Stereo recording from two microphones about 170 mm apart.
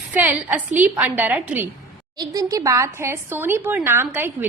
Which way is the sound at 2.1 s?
20° right (ahead or behind).